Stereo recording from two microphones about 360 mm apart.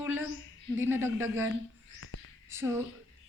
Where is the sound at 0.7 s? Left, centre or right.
Centre.